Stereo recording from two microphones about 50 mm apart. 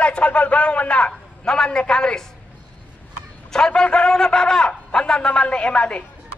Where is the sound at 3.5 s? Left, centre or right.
Centre.